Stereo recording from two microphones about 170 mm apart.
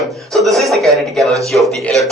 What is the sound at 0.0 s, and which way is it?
A man's voice, centre (ahead or behind).